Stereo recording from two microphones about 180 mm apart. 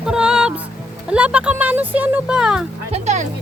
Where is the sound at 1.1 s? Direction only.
5° right (ahead or behind).